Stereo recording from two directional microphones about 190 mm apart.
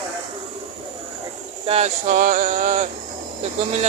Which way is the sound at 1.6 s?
35° right (ahead or behind).